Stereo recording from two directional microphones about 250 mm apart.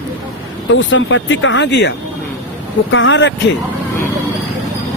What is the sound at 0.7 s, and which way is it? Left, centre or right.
Speech, left.